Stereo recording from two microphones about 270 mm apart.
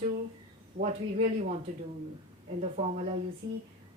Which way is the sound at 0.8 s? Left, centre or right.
Right.